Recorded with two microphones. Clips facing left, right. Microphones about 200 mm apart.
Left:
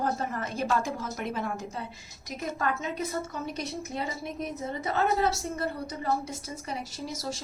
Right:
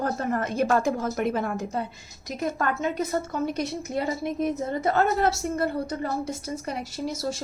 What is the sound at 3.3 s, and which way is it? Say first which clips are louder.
Speech: right 7 dB; 55° right (ahead or behind).